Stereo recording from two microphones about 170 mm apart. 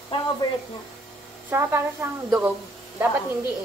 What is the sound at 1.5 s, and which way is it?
Speech, 15° right (ahead or behind).